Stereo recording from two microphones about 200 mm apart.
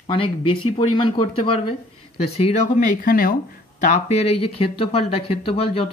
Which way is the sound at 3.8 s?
30° left (ahead or behind).